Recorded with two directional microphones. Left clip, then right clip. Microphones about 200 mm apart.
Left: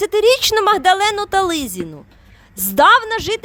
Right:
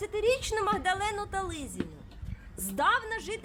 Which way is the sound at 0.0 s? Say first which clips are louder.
Left 15 dB; 55° left (ahead or behind).